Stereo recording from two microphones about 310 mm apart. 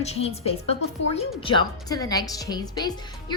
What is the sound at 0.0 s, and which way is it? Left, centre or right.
A woman's voice, centre.